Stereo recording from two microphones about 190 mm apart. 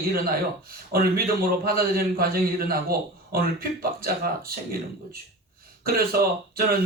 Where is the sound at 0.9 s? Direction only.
50° right (ahead or behind).